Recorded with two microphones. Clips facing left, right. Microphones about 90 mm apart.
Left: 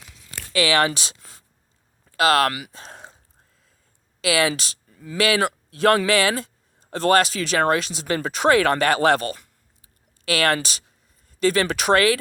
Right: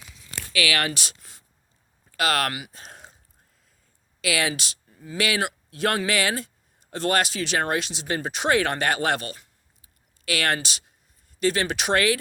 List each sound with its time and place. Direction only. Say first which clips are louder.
0.5 s speech: left 6 dB; 30° left (ahead or behind)
4.2 s speech: left 5 dB; 35° left (ahead or behind)